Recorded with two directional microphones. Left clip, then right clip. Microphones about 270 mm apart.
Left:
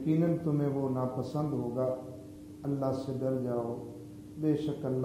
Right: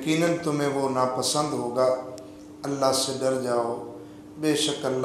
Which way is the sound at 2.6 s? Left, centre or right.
Centre.